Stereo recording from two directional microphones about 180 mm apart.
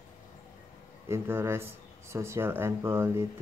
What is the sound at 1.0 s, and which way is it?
Speech, 15° right (ahead or behind).